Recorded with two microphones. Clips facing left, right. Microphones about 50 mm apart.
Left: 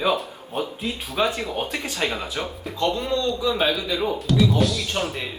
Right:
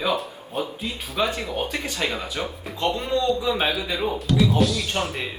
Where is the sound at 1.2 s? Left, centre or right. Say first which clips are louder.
Left 1 dB; centre.